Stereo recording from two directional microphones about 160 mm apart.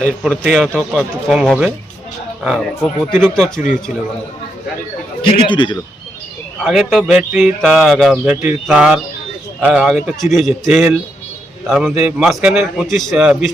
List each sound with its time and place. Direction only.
0.2 s a man's voice: centre (ahead or behind)
5.5 s speech: 30° left (ahead or behind)
6.7 s a man's voice: centre (ahead or behind)